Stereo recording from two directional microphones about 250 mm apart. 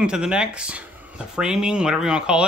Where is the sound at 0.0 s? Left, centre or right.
Centre.